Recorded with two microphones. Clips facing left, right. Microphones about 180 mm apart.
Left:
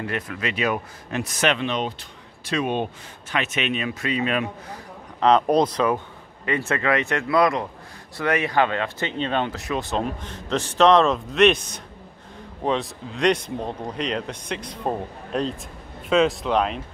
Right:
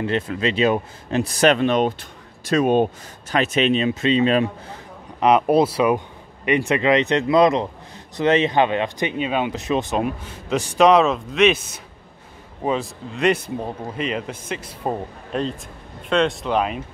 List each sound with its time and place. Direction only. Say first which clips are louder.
0.0 s speech: right 6 dB; 25° right (ahead or behind)
5.2 s speech: right 2 dB; 10° right (ahead or behind)
9.6 s speech: right 4 dB; 20° right (ahead or behind); by 16.8 s 5° right (ahead or behind)